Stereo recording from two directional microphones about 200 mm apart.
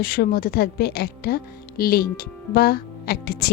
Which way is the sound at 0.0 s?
45° left (ahead or behind).